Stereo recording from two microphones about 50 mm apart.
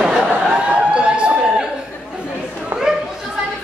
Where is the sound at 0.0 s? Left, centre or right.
Centre.